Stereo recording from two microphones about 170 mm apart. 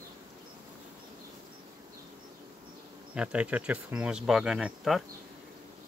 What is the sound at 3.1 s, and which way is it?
Speech, 5° right (ahead or behind).